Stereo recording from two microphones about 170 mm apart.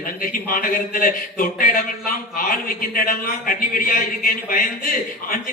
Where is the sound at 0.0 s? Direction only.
55° left (ahead or behind).